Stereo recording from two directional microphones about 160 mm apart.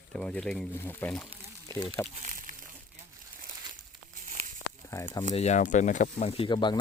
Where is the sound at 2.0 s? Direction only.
45° right (ahead or behind).